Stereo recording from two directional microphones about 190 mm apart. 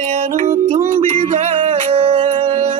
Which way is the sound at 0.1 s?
35° right (ahead or behind).